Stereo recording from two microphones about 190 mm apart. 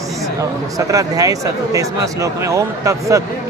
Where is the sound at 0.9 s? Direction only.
20° right (ahead or behind).